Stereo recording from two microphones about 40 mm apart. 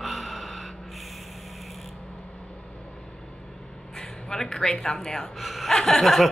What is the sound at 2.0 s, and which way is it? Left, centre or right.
Vehicle, centre.